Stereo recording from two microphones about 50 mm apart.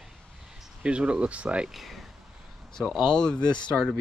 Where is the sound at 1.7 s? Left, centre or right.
Centre.